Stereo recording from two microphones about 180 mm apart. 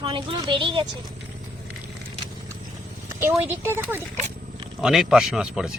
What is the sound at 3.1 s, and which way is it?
A man's voice, 10° right (ahead or behind).